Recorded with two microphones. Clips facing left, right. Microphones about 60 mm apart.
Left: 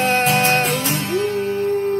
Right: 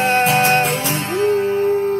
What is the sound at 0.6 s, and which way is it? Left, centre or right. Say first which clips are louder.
Music: right 1 dB; right.